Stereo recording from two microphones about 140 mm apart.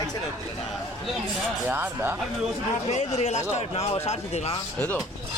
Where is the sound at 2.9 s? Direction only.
55° left (ahead or behind).